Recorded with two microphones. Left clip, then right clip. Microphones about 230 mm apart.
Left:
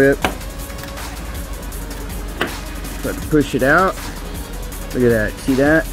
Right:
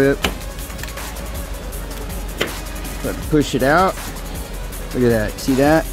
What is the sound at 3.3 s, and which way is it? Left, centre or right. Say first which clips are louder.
Speech: left 1 dB; centre.